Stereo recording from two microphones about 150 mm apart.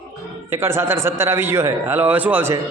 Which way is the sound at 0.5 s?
15° right (ahead or behind).